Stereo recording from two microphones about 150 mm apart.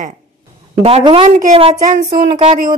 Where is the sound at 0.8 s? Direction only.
40° right (ahead or behind).